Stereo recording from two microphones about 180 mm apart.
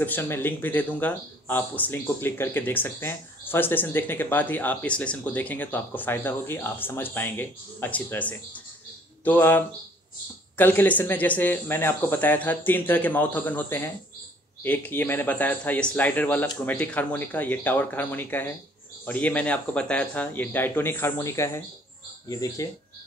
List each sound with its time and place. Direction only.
0.0 s speech: 10° left (ahead or behind)